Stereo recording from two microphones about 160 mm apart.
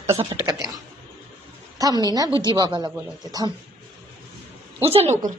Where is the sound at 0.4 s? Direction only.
25° right (ahead or behind).